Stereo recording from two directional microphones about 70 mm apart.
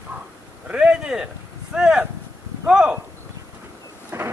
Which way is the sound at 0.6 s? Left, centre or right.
Centre.